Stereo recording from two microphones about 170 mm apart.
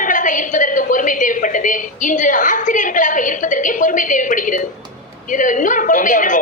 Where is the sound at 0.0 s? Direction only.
50° left (ahead or behind).